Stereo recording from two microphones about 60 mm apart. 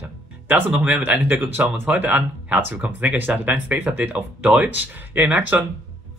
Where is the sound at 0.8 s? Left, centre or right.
Centre.